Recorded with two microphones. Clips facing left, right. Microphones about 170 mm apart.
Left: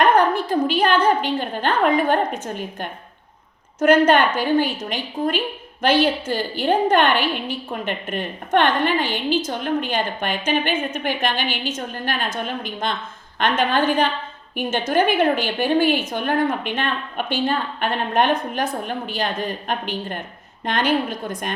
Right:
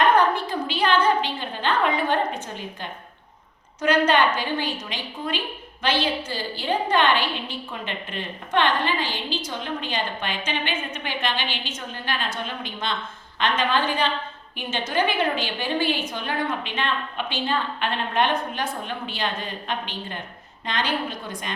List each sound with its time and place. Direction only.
0.0 s a woman's voice: 45° left (ahead or behind)
3.8 s a woman's voice: 45° left (ahead or behind)